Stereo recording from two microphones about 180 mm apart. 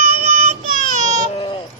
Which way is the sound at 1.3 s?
30° left (ahead or behind).